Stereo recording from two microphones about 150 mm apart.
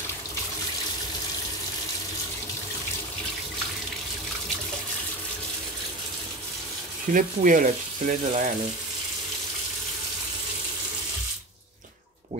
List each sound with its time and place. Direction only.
7.1 s speech: 60° right (ahead or behind)